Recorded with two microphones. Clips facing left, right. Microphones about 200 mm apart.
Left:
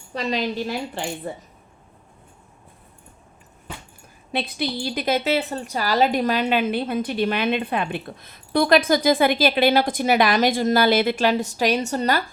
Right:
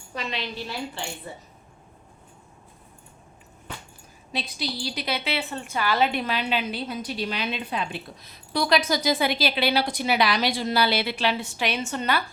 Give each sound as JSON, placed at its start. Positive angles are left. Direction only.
{"t": 0.1, "sound": "a woman's voice", "side_deg": 40}
{"t": 4.3, "sound": "a woman's voice", "side_deg": 55}